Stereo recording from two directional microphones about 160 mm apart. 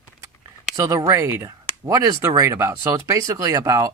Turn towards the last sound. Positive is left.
turn(degrees=-20)  # may be behind; listen again after turning